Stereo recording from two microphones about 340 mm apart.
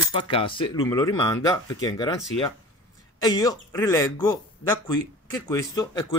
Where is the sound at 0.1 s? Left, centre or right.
Centre.